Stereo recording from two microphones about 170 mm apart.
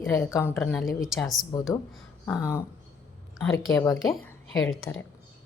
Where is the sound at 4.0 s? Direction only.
Centre (ahead or behind).